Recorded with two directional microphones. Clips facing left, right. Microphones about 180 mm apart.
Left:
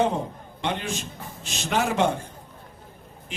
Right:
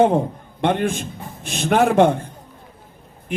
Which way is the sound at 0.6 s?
55° right (ahead or behind).